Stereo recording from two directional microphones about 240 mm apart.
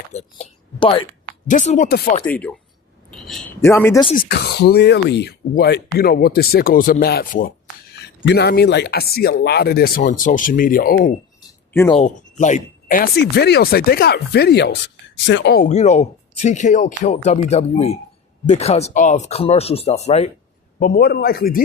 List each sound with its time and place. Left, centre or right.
0.1 s speech: left
2.2 s speech: centre
3.1 s a sound: centre
3.6 s speech: centre
4.1 s speech: left
11.7 s speech: centre
11.9 s speech: left
15.6 s speech: left
20.7 s speech: left